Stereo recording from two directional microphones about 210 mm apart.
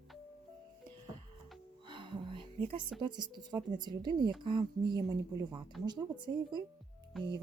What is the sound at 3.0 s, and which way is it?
Speech, 20° right (ahead or behind).